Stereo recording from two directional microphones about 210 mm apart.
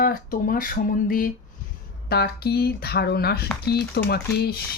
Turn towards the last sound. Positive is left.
turn(degrees=50)  # may be behind; listen again after turning